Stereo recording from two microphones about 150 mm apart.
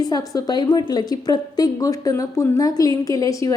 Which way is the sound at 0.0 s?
25° left (ahead or behind).